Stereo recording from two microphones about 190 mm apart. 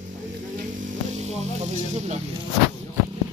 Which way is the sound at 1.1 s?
35° right (ahead or behind).